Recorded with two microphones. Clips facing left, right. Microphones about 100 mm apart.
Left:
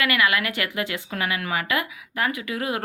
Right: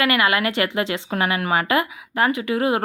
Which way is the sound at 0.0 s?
30° right (ahead or behind).